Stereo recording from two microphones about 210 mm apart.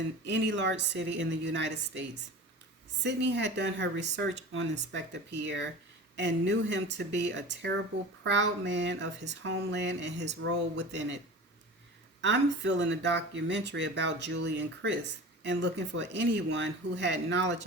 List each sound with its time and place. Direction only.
0.3 s speech: 55° right (ahead or behind)
12.2 s speech: 60° right (ahead or behind)